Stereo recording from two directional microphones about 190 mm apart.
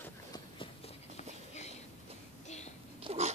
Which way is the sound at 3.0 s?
30° right (ahead or behind).